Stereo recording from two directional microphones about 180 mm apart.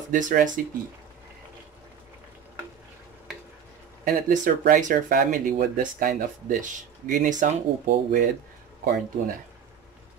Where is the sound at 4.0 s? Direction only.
50° right (ahead or behind).